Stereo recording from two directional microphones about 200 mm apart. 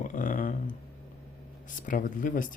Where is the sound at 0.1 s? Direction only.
40° left (ahead or behind).